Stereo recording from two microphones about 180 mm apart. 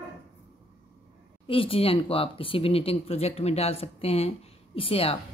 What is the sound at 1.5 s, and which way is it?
Speech, 30° left (ahead or behind).